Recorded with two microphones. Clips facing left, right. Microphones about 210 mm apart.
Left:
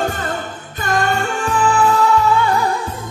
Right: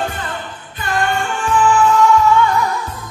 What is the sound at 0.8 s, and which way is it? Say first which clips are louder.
Music: left 1 dB; 40° left (ahead or behind).